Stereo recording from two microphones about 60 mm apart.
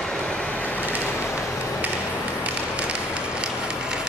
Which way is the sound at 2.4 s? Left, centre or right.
Right.